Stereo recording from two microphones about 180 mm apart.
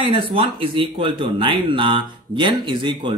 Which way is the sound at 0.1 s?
30° right (ahead or behind).